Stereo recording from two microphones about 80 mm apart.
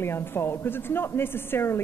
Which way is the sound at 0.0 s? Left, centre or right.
Left.